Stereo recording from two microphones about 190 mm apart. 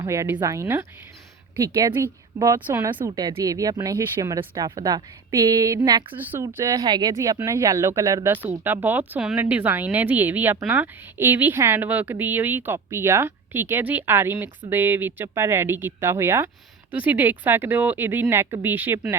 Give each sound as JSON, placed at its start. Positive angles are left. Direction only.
{"t": 0.0, "sound": "speech", "side_deg": -15}
{"t": 6.1, "sound": "speech", "side_deg": -10}